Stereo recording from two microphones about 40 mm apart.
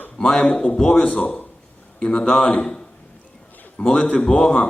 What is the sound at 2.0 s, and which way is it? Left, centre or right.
Speech, centre.